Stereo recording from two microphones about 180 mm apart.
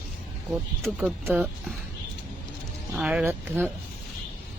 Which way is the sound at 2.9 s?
5° right (ahead or behind).